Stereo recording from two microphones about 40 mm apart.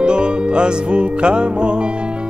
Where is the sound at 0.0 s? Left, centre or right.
Right.